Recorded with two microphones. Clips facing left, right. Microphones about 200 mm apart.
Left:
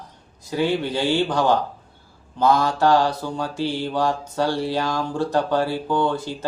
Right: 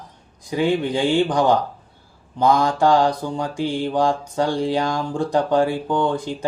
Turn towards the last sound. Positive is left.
turn(degrees=-15)  # may be behind; listen again after turning